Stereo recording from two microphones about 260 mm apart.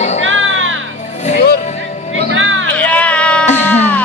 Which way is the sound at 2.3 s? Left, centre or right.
Right.